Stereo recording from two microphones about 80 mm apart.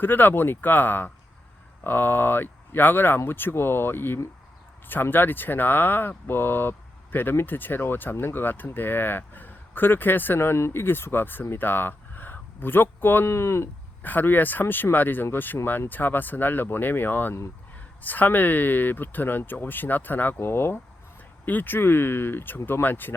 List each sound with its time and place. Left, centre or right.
0.0 s speech: left
14.0 s speech: left